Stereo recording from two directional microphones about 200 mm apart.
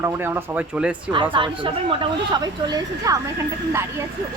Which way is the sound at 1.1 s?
25° right (ahead or behind).